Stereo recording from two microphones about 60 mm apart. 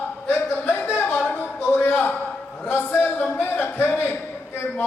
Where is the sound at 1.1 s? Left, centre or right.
Left.